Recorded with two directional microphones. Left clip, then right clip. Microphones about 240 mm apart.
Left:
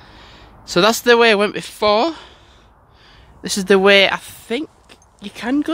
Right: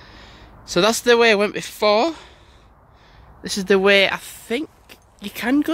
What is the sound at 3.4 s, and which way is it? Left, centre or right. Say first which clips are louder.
Speech: left 3 dB; centre.